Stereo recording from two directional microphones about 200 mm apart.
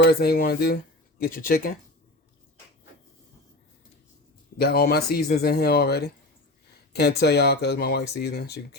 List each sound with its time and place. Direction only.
0.0 s speech: 50° left (ahead or behind)
4.5 s speech: 50° left (ahead or behind)
7.2 s speech: 55° left (ahead or behind)